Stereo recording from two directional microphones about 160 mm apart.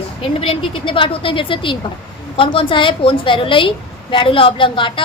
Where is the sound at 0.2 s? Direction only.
35° left (ahead or behind).